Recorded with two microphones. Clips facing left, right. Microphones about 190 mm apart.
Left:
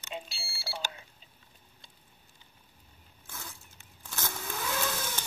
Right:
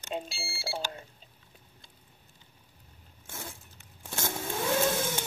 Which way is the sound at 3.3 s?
25° right (ahead or behind).